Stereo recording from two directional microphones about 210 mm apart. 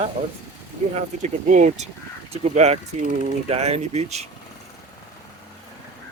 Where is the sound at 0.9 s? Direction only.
35° right (ahead or behind).